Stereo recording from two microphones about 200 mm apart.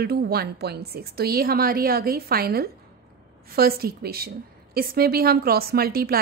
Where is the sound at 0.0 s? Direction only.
50° right (ahead or behind).